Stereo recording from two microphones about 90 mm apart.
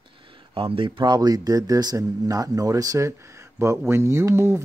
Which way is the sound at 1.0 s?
50° right (ahead or behind).